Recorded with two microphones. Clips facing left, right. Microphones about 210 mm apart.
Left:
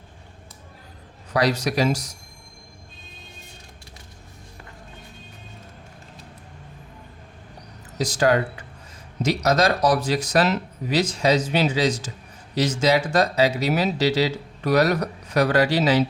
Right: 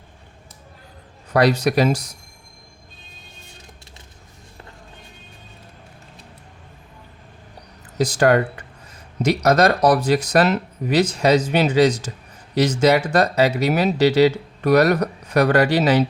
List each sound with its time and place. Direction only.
1.3 s speech: 55° right (ahead or behind)
7.9 s speech: 60° right (ahead or behind)